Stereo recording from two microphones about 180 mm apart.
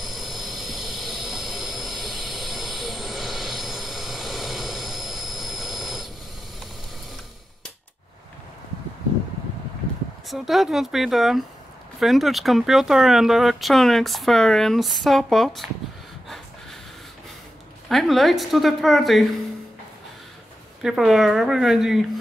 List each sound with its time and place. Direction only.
0.0 s jet engine: centre (ahead or behind)
10.2 s speech: centre (ahead or behind)
17.8 s speech: centre (ahead or behind)
20.8 s speech: centre (ahead or behind)